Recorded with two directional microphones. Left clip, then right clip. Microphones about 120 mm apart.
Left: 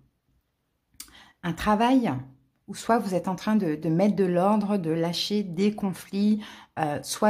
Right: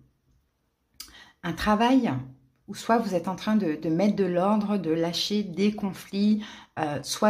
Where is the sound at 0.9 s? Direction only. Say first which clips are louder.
Right 2 dB; 30° left (ahead or behind).